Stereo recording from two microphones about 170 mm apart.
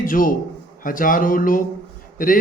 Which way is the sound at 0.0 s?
55° left (ahead or behind).